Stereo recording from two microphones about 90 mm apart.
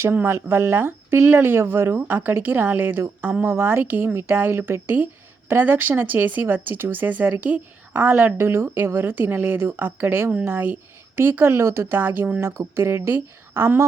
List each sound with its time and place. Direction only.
0.0 s speech: 25° right (ahead or behind)
3.4 s speech: 25° right (ahead or behind)